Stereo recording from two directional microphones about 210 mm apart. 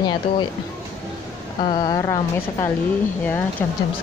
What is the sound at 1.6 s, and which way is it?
Speech, 20° left (ahead or behind).